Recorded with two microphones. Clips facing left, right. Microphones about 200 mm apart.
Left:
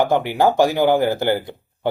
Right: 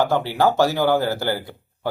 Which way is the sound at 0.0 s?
15° left (ahead or behind).